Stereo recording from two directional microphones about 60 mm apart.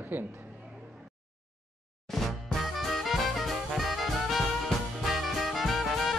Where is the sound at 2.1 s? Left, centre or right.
Centre.